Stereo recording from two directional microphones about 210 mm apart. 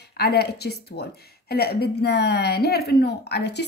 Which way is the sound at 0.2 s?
50° left (ahead or behind).